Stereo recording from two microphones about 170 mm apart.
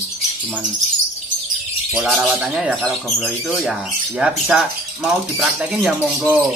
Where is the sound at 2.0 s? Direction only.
Centre (ahead or behind).